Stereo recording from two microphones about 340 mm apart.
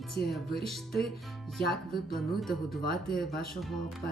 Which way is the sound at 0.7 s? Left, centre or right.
Centre.